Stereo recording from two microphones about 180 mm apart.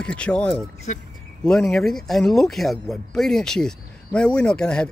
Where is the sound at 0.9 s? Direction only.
40° left (ahead or behind).